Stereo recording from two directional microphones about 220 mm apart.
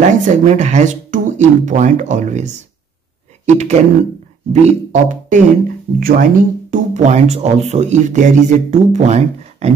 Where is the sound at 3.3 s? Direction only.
30° right (ahead or behind).